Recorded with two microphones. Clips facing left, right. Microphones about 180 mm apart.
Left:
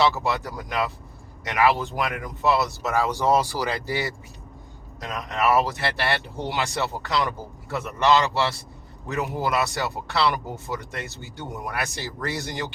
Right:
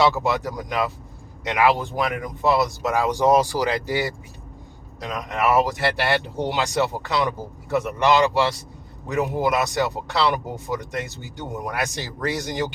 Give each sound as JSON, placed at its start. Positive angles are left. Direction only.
{"t": 0.0, "sound": "speech", "side_deg": -15}
{"t": 5.3, "sound": "speech", "side_deg": -15}